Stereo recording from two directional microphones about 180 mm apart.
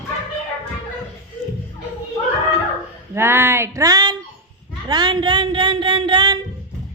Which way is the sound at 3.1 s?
15° right (ahead or behind).